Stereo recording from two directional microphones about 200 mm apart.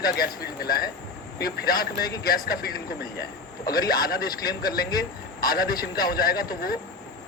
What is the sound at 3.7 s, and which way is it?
Speech, 50° left (ahead or behind).